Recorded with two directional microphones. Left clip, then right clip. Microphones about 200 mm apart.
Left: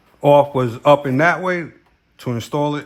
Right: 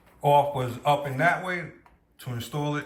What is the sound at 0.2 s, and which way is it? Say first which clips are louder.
Speech: left 8 dB; 35° left (ahead or behind).